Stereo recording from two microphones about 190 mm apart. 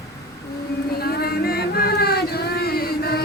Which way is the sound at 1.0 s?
55° left (ahead or behind).